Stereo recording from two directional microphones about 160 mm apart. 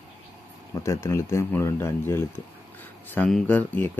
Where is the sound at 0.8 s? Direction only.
20° left (ahead or behind).